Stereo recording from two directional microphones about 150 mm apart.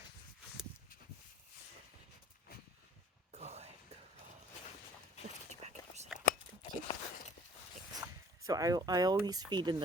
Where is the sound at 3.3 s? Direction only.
45° right (ahead or behind).